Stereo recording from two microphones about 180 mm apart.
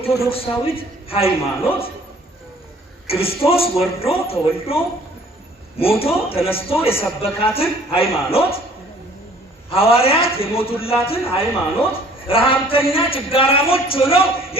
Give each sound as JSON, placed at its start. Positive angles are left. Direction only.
{"t": 0.0, "sound": "a man's voice", "side_deg": 30}
{"t": 3.1, "sound": "a man's voice", "side_deg": 30}
{"t": 5.8, "sound": "a man's voice", "side_deg": 30}
{"t": 9.6, "sound": "a man's voice", "side_deg": 30}